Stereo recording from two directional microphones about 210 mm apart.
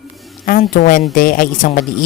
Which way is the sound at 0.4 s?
40° left (ahead or behind).